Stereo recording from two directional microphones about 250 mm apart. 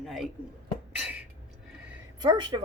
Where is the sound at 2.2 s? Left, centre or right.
Centre.